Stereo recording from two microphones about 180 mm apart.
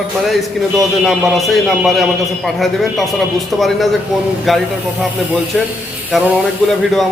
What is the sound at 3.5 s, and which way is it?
A man's voice, centre (ahead or behind).